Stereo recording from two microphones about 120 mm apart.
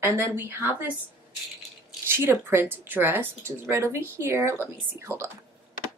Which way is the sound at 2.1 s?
20° right (ahead or behind).